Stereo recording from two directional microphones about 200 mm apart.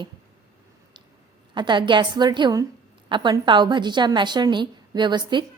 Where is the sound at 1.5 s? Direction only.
25° right (ahead or behind).